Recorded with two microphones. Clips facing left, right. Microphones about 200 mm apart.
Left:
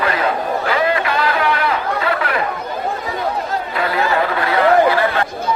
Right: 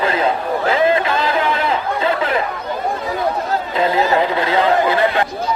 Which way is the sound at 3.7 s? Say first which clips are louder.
Right 3 dB; 20° right (ahead or behind).